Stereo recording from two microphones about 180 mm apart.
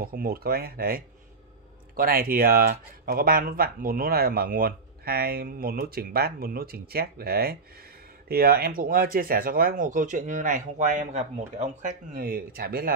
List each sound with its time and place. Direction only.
0.0 s speech: 55° right (ahead or behind)